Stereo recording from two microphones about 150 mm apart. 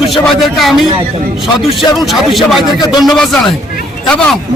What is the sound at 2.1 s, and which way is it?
A man's voice, centre (ahead or behind).